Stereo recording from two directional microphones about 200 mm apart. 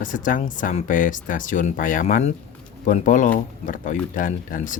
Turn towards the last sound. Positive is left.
turn(degrees=40)  # may be behind; listen again after turning